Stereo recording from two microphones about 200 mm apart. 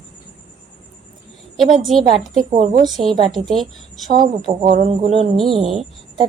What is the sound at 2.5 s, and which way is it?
Speech, 45° right (ahead or behind).